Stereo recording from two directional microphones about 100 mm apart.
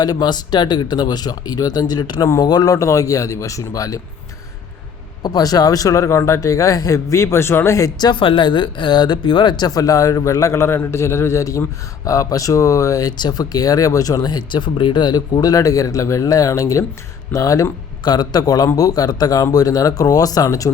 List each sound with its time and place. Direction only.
0.0 s speech: 45° left (ahead or behind)
5.2 s speech: 40° left (ahead or behind)
8.2 s speech: 60° left (ahead or behind); by 20.7 s 35° left (ahead or behind)